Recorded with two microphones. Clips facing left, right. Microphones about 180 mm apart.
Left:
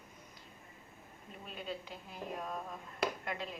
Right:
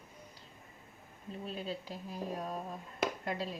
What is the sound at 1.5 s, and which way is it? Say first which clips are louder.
A woman's voice: right 2 dB; 35° right (ahead or behind).